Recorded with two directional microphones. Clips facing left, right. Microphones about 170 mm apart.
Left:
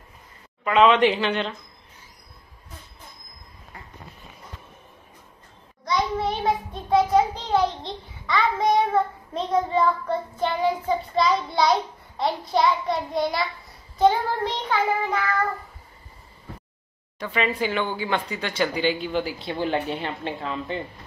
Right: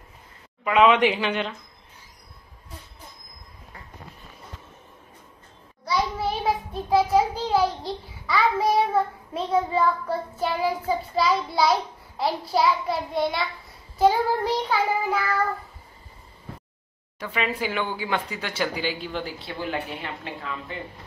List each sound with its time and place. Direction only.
0.7 s speech: 10° right (ahead or behind)
5.9 s child singing: 5° right (ahead or behind)
13.9 s speech: 10° right (ahead or behind)
17.2 s speech: 10° right (ahead or behind)
19.3 s speech: 25° left (ahead or behind)